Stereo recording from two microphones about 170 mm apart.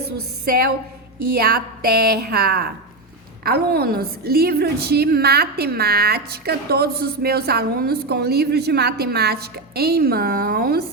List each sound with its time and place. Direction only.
0.4 s speech: 60° right (ahead or behind)
2.0 s a woman's voice: 65° right (ahead or behind)